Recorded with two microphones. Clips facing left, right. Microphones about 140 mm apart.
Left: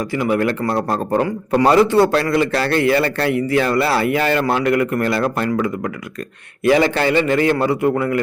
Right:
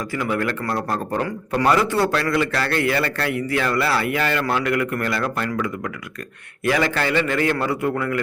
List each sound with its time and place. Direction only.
0.1 s a man's voice: 20° left (ahead or behind)